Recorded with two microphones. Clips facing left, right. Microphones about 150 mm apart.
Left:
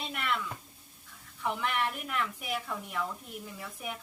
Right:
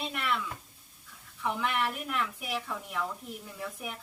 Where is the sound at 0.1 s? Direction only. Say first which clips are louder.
Left 1 dB; centre (ahead or behind).